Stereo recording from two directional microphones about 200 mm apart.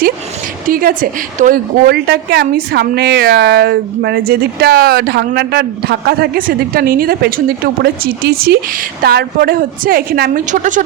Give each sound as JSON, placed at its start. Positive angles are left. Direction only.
{"t": 0.7, "sound": "a sound", "side_deg": -45}
{"t": 1.4, "sound": "a woman's voice", "side_deg": -45}
{"t": 10.5, "sound": "speech", "side_deg": -40}